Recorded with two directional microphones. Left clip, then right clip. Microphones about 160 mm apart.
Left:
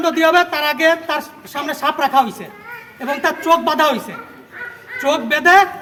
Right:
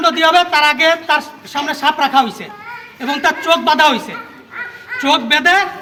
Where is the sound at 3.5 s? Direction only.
20° left (ahead or behind).